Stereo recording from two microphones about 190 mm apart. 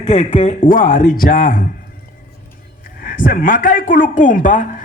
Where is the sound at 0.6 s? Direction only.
45° left (ahead or behind).